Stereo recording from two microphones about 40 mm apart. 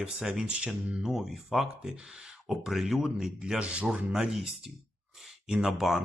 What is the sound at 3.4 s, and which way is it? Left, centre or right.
Speech, right.